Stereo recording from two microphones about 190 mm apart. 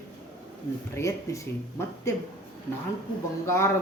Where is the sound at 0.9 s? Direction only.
15° left (ahead or behind).